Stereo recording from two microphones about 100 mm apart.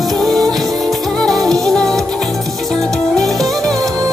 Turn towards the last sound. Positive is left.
turn(degrees=0)  # may be behind; listen again after turning